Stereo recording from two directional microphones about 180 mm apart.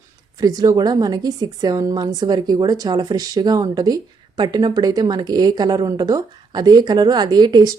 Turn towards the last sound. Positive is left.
turn(degrees=-25)  # may be behind; listen again after turning